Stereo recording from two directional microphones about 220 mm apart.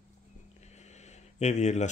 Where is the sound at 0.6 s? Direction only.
30° left (ahead or behind).